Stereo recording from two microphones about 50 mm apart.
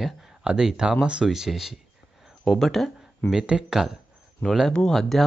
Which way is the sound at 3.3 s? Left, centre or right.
Centre.